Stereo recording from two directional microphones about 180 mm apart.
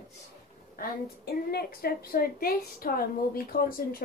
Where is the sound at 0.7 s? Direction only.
55° left (ahead or behind).